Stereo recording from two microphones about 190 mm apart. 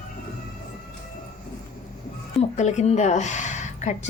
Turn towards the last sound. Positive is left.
turn(degrees=40)  # may be behind; listen again after turning